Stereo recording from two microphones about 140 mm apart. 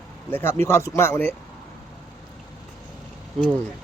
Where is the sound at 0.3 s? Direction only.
15° left (ahead or behind).